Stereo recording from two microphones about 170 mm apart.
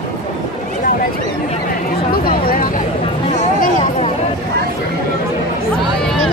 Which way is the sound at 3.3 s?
40° left (ahead or behind).